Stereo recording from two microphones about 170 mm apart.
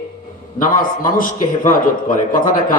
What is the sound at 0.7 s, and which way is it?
A man's voice, 55° left (ahead or behind).